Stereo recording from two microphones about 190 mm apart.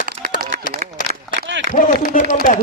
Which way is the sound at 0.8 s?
50° right (ahead or behind).